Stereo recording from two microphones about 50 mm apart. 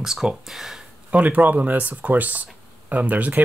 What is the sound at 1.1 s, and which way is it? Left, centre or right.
Speech, right.